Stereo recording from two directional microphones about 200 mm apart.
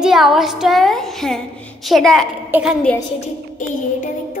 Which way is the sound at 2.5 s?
10° right (ahead or behind).